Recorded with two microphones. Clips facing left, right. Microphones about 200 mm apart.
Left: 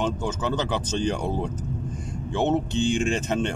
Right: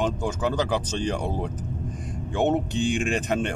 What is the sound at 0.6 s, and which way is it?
Speech, 10° right (ahead or behind).